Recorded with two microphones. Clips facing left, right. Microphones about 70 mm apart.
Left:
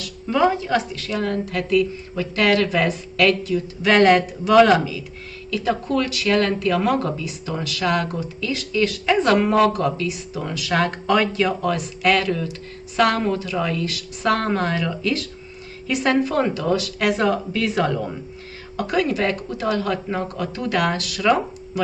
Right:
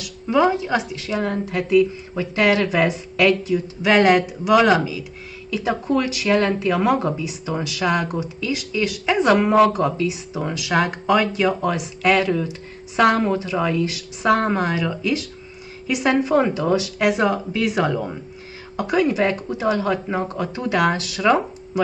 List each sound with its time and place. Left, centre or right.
0.0 s a woman's voice: centre